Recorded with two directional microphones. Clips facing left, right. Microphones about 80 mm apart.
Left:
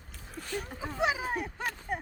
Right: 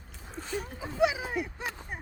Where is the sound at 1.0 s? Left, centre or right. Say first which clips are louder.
Right 3 dB; left.